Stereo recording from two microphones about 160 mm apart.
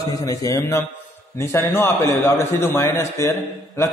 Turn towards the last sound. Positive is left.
turn(degrees=20)  # may be behind; listen again after turning